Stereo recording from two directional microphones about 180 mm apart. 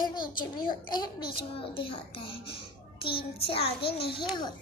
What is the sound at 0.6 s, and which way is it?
A child's voice, 25° left (ahead or behind).